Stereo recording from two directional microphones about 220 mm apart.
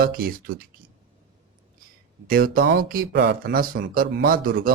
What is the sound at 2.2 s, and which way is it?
A man's voice, 40° right (ahead or behind).